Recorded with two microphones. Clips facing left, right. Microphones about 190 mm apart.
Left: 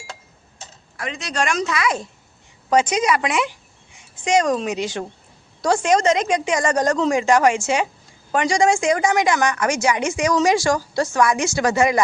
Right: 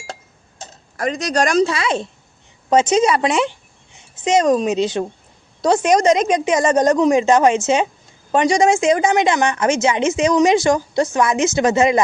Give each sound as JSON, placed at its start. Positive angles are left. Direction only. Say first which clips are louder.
{"t": 0.6, "sound": "a woman's voice", "louder": "right 8 dB", "side_deg": -40}